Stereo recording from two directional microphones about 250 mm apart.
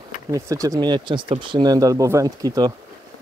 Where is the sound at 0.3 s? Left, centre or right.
Centre.